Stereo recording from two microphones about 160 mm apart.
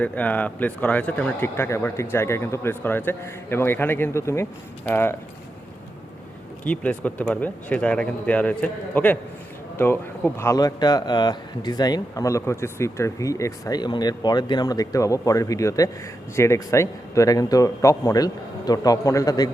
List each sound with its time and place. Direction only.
0.0 s speech: 10° left (ahead or behind)
6.7 s speech: 10° left (ahead or behind)